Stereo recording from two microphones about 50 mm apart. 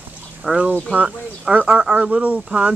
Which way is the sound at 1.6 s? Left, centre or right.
Centre.